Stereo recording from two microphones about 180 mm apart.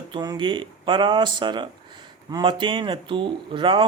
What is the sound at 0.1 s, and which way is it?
Speech, 25° right (ahead or behind).